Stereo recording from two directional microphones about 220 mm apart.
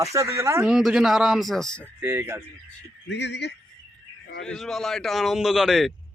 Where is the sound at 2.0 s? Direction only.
10° right (ahead or behind).